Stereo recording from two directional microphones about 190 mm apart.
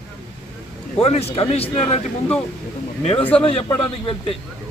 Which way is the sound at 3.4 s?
30° left (ahead or behind).